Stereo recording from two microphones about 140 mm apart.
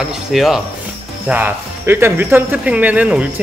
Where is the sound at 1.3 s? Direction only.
15° right (ahead or behind).